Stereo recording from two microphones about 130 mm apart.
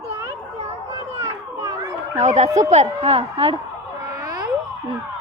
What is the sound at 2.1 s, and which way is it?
Speech, 60° right (ahead or behind).